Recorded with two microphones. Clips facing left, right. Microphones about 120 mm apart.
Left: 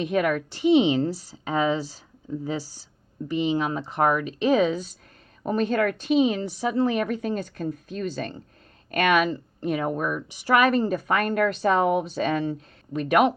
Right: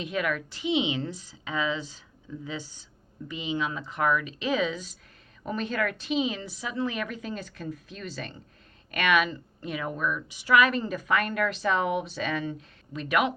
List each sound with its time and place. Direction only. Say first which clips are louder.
0.0 s a woman's voice: left 6 dB; 45° left (ahead or behind)